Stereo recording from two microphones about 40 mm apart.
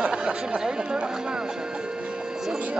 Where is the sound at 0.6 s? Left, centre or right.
Centre.